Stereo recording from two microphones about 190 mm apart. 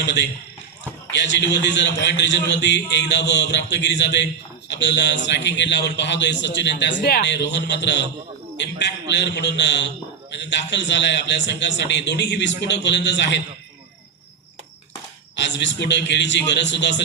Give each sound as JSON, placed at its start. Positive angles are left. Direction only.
{"t": 0.0, "sound": "a man's voice", "side_deg": 65}
{"t": 15.4, "sound": "a man's voice", "side_deg": 65}